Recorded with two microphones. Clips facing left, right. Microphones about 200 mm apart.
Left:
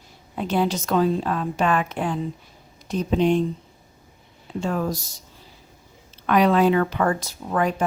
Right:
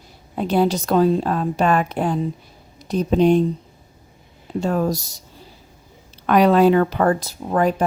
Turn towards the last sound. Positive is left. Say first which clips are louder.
# right 4 dB
turn(degrees=-35)  # may be behind; listen again after turning